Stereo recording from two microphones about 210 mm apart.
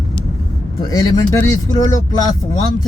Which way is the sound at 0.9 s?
15° left (ahead or behind).